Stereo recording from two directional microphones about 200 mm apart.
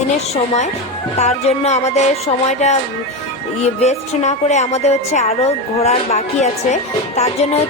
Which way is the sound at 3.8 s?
35° left (ahead or behind).